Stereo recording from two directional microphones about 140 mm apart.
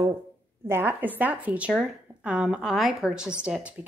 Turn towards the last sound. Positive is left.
turn(degrees=-5)  # may be behind; listen again after turning